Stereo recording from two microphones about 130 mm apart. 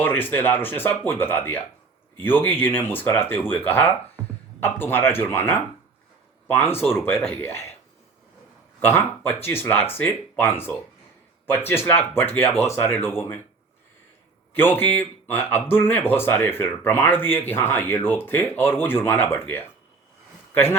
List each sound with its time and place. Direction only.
0.0 s speech: 15° left (ahead or behind)
8.8 s speech: 15° left (ahead or behind)
14.5 s a man's voice: 15° left (ahead or behind)